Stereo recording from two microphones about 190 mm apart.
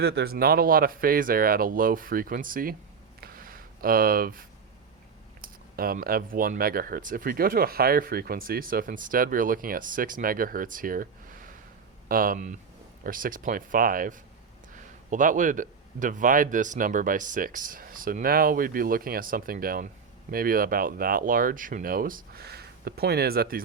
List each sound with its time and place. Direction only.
0.0 s speech: 55° right (ahead or behind)
3.2 s a sound: 50° right (ahead or behind)
6.3 s speech: 50° right (ahead or behind)